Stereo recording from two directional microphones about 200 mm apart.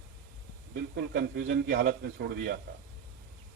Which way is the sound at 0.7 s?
50° right (ahead or behind).